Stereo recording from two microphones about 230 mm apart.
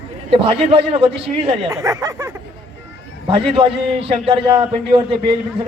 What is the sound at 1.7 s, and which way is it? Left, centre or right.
A man's voice, centre.